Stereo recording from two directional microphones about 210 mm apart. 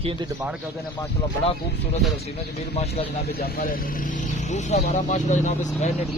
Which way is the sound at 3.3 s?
45° left (ahead or behind).